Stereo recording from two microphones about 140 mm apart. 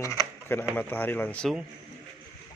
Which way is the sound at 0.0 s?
20° left (ahead or behind).